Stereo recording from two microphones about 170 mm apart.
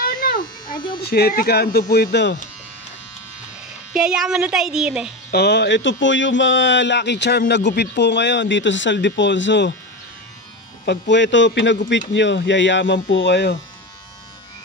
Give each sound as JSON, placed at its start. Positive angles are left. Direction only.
{"t": 0.0, "sound": "a sound", "side_deg": 55}
{"t": 1.0, "sound": "speech", "side_deg": 65}
{"t": 3.9, "sound": "speech", "side_deg": -5}
{"t": 5.3, "sound": "speech", "side_deg": 80}
{"t": 10.9, "sound": "speech", "side_deg": 90}